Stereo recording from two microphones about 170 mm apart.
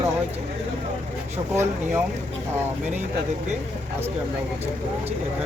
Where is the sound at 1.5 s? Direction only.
15° right (ahead or behind).